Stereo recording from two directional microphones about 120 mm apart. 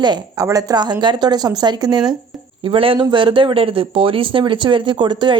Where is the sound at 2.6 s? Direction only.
50° right (ahead or behind).